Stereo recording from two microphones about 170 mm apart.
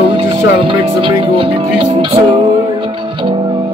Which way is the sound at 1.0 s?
30° right (ahead or behind).